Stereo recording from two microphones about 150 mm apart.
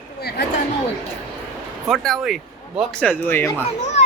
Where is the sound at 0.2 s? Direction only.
90° left.